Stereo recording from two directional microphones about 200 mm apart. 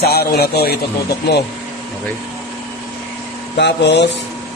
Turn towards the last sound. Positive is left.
turn(degrees=60)  # may be behind; listen again after turning